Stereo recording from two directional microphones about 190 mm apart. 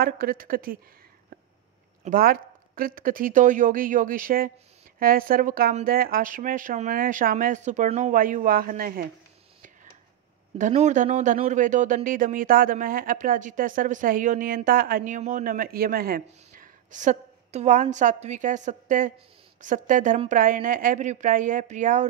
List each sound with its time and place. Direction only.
0.0 s speech: 50° right (ahead or behind)
2.0 s speech: 50° right (ahead or behind)
10.6 s speech: 40° right (ahead or behind)